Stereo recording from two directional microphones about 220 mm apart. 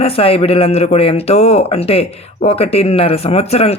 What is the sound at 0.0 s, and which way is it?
Speech, 25° left (ahead or behind).